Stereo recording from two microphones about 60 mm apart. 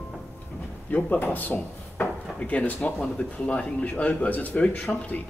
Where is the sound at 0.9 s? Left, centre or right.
Left.